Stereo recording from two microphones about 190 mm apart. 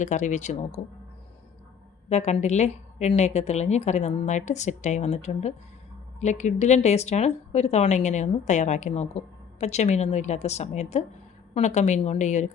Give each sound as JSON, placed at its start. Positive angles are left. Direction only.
{"t": 0.0, "sound": "speech", "side_deg": 40}
{"t": 2.0, "sound": "speech", "side_deg": 35}